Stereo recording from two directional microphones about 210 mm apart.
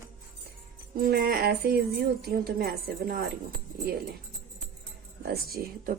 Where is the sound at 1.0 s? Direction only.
45° right (ahead or behind).